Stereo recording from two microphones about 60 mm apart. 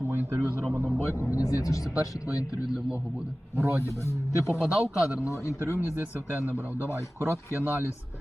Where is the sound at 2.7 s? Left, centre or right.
Centre.